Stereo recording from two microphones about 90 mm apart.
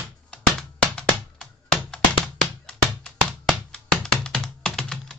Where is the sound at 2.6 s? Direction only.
5° left (ahead or behind).